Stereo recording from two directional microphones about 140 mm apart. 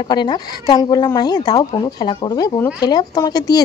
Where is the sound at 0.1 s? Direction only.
30° left (ahead or behind).